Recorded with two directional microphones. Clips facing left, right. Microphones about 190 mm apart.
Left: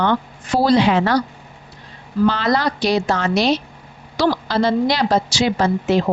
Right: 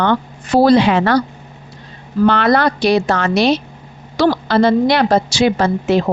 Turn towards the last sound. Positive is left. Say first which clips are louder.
# right 2 dB
turn(degrees=-65)  # may be behind; listen again after turning